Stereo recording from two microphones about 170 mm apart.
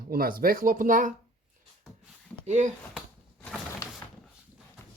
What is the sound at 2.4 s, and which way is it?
Speech, 45° right (ahead or behind).